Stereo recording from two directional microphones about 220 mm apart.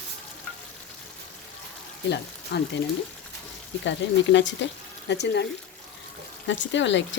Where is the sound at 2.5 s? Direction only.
50° left (ahead or behind).